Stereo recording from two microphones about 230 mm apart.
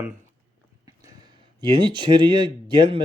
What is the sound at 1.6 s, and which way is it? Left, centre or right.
Speech, centre.